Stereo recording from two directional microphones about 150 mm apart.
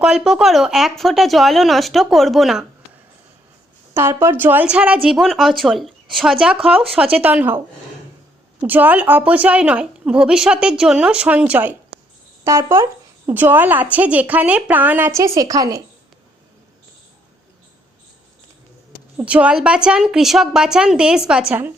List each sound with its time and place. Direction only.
0.0 s speech: 5° right (ahead or behind)
3.9 s a woman's voice: 15° right (ahead or behind)
8.6 s a woman's voice: 10° right (ahead or behind)
19.1 s speech: 10° right (ahead or behind)